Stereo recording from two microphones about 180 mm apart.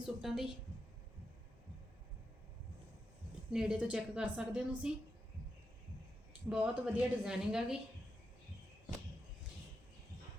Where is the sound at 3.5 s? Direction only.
5° right (ahead or behind).